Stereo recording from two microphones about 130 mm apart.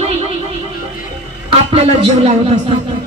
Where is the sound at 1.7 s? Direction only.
50° right (ahead or behind).